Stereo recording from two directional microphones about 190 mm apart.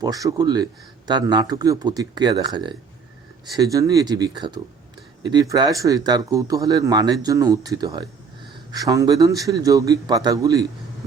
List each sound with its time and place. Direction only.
0.0 s a man's voice: 20° right (ahead or behind)